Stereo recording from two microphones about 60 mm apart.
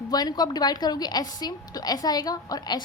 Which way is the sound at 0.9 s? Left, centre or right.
Left.